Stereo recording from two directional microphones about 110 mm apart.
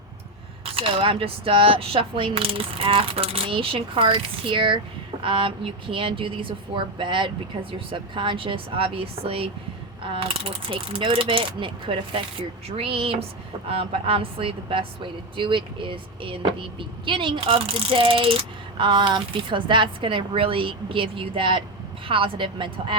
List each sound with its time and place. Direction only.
0.6 s a woman's voice: 55° right (ahead or behind)